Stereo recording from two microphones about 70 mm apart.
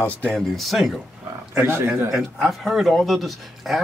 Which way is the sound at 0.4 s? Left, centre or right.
Centre.